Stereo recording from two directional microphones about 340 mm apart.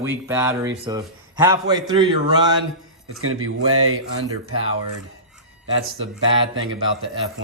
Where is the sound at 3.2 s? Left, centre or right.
Right.